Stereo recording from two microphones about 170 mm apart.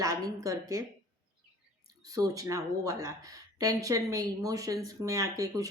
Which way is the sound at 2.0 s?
20° right (ahead or behind).